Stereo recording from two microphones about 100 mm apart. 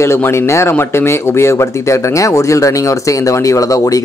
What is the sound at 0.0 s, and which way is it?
Speech, 30° left (ahead or behind).